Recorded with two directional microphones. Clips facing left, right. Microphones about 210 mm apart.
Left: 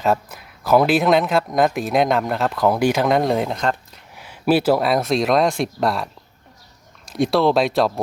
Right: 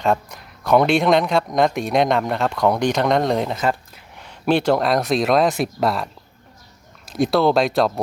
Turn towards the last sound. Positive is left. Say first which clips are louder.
# even
turn(degrees=0)  # may be behind; listen again after turning